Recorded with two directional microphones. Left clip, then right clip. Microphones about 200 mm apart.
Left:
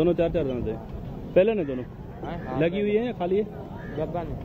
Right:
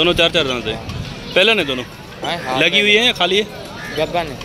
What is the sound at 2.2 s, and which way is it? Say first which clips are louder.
Speech: right 13 dB; 40° right (ahead or behind).